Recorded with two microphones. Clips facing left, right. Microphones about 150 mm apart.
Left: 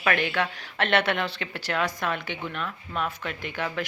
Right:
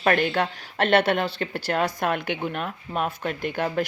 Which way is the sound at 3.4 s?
45° right (ahead or behind).